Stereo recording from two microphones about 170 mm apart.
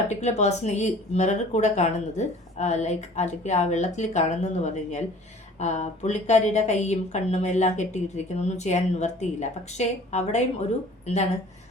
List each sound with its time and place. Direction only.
0.1 s a woman's voice: 40° left (ahead or behind)